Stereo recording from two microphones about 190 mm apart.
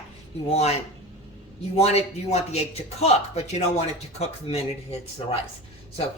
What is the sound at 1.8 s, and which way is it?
A woman's voice, 35° left (ahead or behind).